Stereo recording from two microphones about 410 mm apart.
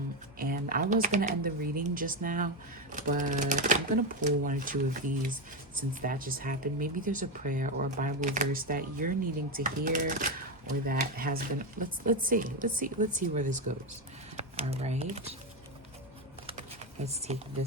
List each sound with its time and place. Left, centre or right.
0.3 s speech: right
17.3 s speech: centre